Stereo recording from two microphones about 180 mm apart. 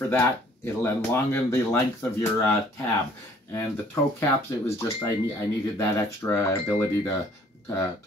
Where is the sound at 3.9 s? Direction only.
15° left (ahead or behind).